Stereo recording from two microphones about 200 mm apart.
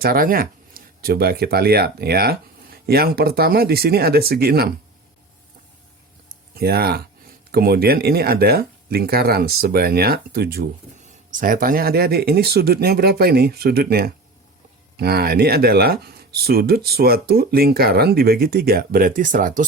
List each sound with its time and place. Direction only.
0.0 s speech: 50° right (ahead or behind)
6.6 s speech: 50° right (ahead or behind)